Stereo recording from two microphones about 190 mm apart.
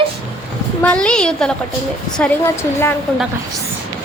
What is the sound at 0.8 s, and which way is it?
Speech, 5° left (ahead or behind).